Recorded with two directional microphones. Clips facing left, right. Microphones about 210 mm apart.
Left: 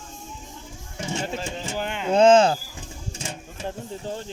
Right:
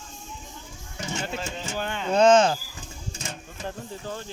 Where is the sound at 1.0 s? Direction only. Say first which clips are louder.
Left 3 dB; 30° left (ahead or behind).